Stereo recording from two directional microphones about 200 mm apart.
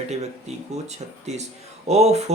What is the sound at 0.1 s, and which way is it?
Speech, 35° right (ahead or behind).